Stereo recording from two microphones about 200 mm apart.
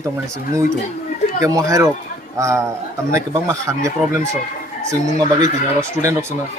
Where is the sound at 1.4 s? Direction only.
15° right (ahead or behind).